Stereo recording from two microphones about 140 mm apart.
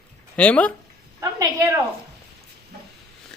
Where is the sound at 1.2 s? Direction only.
20° right (ahead or behind).